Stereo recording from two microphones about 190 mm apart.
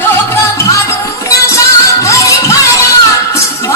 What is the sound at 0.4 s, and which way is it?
Music, 15° left (ahead or behind).